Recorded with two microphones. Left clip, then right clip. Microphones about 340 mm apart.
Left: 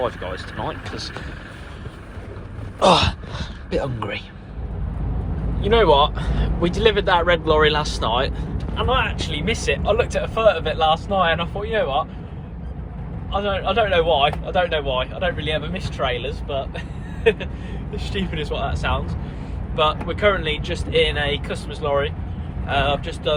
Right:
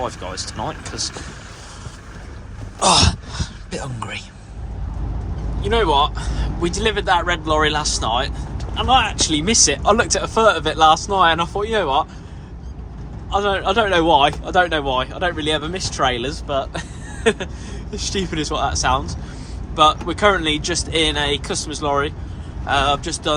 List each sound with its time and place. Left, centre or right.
0.0 s speech: centre
2.7 s a sound: centre
5.6 s speech: centre
13.3 s speech: right